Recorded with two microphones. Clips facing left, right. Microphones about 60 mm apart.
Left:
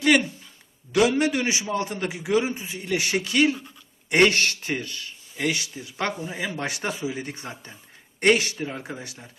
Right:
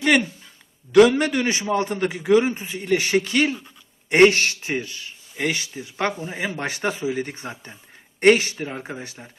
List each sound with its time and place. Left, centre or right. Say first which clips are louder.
1.2 s a man's voice: right 2 dB; right